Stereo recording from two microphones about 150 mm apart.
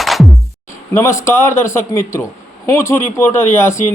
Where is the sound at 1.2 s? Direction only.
20° left (ahead or behind).